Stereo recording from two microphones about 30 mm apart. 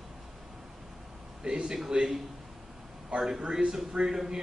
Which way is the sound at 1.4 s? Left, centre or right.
Right.